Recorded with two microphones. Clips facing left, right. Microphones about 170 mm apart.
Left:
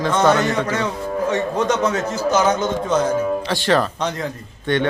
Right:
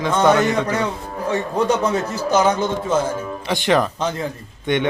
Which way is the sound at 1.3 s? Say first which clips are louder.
Right 2 dB; 35° right (ahead or behind).